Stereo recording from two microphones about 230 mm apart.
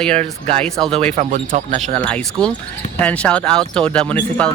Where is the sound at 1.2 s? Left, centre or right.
Right.